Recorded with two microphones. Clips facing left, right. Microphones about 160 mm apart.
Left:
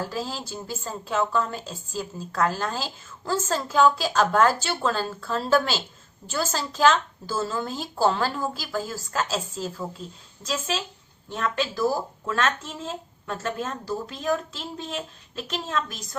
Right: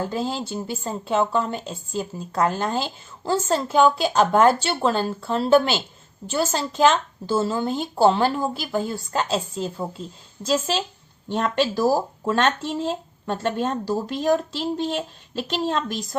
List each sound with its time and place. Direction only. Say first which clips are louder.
0.0 s a woman's voice: right 5 dB; 25° right (ahead or behind)